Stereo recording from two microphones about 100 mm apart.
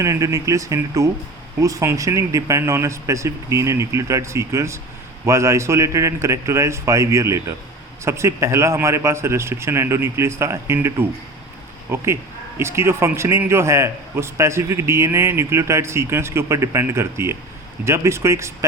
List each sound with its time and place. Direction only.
0.0 s a man's voice: 30° right (ahead or behind)
11.9 s a man's voice: 25° right (ahead or behind)